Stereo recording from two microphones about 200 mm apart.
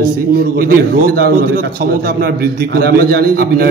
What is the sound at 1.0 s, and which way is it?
A man's voice, 50° right (ahead or behind).